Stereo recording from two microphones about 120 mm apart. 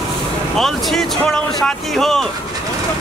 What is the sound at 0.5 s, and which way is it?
Speech, centre (ahead or behind).